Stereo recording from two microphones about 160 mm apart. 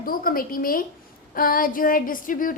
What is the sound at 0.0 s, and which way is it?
A woman's voice, 65° left (ahead or behind).